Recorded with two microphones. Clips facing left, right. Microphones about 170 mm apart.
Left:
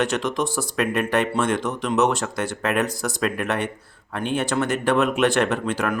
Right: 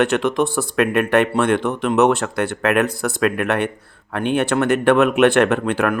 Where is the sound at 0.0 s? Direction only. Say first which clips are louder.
Right 6 dB; 60° right (ahead or behind).